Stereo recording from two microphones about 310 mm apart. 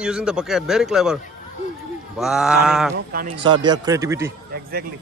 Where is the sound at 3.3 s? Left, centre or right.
Centre.